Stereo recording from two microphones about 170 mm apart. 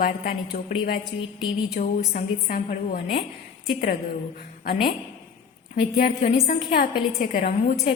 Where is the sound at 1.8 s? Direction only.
55° left (ahead or behind).